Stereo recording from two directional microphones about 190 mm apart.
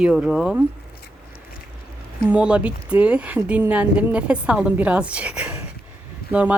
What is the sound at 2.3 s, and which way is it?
Speech, 5° right (ahead or behind).